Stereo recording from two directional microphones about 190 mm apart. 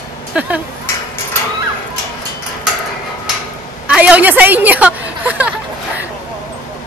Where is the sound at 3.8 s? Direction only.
5° right (ahead or behind).